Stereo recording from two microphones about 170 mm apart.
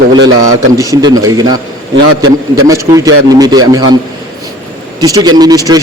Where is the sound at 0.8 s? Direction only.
20° right (ahead or behind).